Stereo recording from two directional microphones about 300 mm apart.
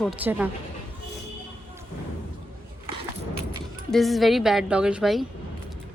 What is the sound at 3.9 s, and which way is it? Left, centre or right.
A woman's voice, centre.